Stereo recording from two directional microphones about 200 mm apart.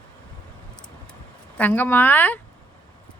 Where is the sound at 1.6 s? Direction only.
10° left (ahead or behind).